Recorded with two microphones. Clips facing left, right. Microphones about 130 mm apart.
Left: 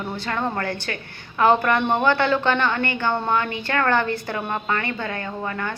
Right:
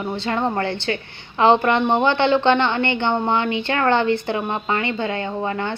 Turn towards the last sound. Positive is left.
turn(degrees=-25)  # may be behind; listen again after turning